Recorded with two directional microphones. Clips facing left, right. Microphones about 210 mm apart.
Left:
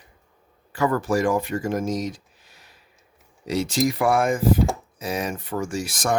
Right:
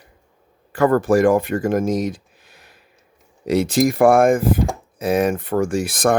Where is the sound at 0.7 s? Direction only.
55° right (ahead or behind).